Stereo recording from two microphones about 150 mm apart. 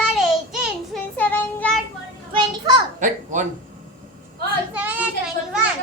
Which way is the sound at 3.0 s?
55° right (ahead or behind).